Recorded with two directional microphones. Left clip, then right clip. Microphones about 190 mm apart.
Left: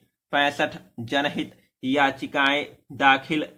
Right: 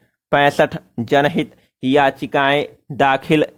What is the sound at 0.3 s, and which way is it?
Speech, 50° right (ahead or behind).